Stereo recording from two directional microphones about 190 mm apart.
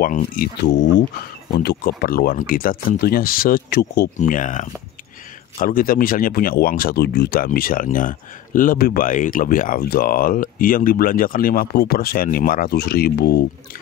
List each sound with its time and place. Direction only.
0.0 s speech: 50° left (ahead or behind)